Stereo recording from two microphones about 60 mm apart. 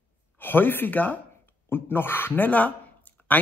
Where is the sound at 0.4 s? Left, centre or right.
Left.